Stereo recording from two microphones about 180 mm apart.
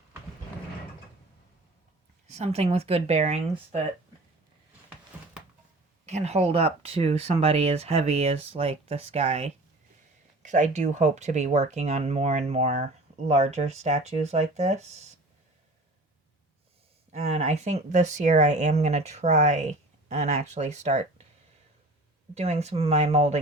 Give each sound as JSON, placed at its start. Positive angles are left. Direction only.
{"t": 2.2, "sound": "speech", "side_deg": -40}
{"t": 6.1, "sound": "speech", "side_deg": -40}
{"t": 17.1, "sound": "speech", "side_deg": -35}
{"t": 22.4, "sound": "speech", "side_deg": -35}